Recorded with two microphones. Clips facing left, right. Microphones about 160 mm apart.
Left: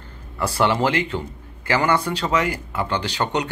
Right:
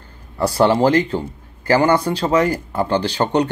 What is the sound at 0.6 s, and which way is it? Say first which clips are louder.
Speech: right 6 dB; 35° right (ahead or behind).